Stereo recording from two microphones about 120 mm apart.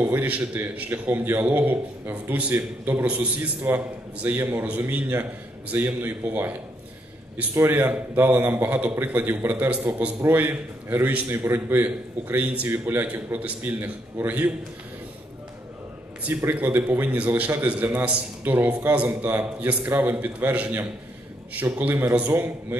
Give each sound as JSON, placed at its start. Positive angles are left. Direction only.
{"t": 0.0, "sound": "a man's voice", "side_deg": -15}
{"t": 16.2, "sound": "a man's voice", "side_deg": -15}